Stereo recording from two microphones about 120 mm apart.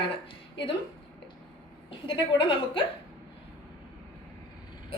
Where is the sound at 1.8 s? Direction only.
45° left (ahead or behind).